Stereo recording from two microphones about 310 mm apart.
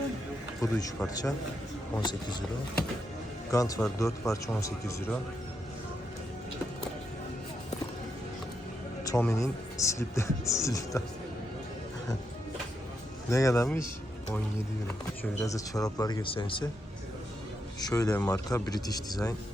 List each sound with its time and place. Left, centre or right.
0.6 s speech: centre
3.5 s speech: centre
9.0 s speech: centre
13.3 s speech: centre
14.8 s speech: centre
17.7 s speech: centre